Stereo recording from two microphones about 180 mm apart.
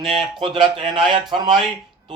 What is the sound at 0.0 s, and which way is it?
Speech, centre (ahead or behind).